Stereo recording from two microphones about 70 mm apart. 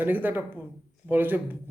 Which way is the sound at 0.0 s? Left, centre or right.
Right.